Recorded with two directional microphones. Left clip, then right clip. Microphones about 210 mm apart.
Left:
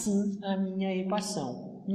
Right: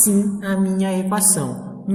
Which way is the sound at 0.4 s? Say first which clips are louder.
Right 10 dB; 40° right (ahead or behind).